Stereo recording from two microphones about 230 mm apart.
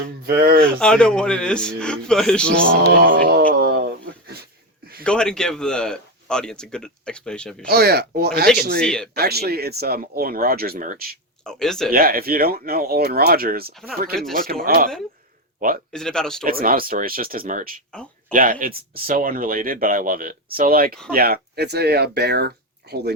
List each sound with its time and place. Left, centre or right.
0.3 s speech: right
0.6 s a man's voice: centre
3.0 s a sound: right
5.0 s a man's voice: centre
7.7 s speech: right
8.8 s a man's voice: centre
9.1 s speech: right
11.4 s a man's voice: centre
11.9 s speech: right
15.9 s a man's voice: centre
16.4 s speech: right